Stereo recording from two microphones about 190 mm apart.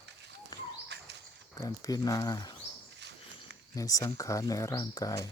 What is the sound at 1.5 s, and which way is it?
Speech, 20° left (ahead or behind).